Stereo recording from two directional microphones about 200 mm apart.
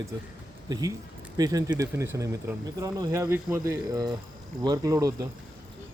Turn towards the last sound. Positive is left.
turn(degrees=-15)  # may be behind; listen again after turning